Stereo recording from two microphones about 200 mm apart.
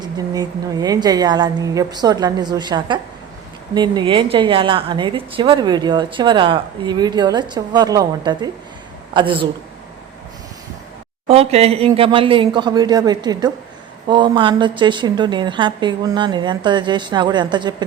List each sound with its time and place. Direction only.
0.0 s a woman's voice: 20° right (ahead or behind)
11.3 s a woman's voice: 30° right (ahead or behind)